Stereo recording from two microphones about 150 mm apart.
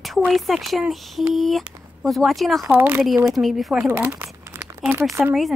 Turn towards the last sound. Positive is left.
turn(degrees=-15)  # may be behind; listen again after turning